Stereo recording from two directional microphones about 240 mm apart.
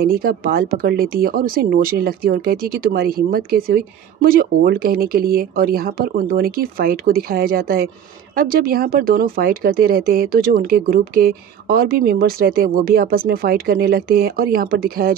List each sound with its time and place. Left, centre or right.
0.0 s speech: right